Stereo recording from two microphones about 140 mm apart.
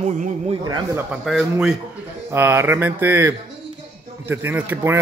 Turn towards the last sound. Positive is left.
turn(degrees=-15)  # may be behind; listen again after turning